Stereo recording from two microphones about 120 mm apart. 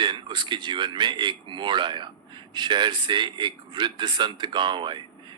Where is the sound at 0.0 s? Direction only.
40° right (ahead or behind).